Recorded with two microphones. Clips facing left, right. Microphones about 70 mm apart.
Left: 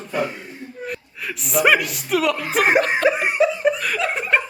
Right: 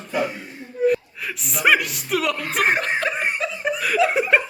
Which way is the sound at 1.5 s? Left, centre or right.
Centre.